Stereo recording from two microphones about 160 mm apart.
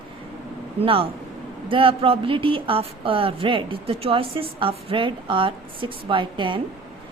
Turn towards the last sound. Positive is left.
turn(degrees=-30)  # may be behind; listen again after turning